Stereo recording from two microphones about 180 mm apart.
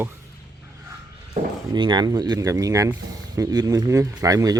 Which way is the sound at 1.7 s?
25° right (ahead or behind).